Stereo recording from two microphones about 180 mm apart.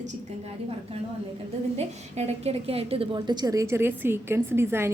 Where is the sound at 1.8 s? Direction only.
35° right (ahead or behind).